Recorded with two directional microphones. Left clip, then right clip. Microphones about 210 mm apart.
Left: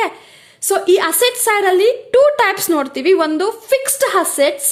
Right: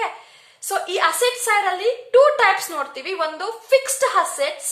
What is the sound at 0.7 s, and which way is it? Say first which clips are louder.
A woman's voice: left 6 dB; 45° left (ahead or behind).